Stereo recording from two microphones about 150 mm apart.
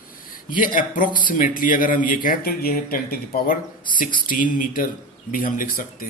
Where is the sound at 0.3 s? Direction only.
65° left (ahead or behind).